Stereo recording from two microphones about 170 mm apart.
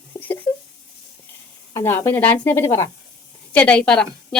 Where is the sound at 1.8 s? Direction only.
15° left (ahead or behind).